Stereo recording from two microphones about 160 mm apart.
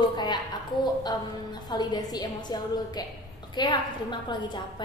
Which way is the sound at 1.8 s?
25° left (ahead or behind).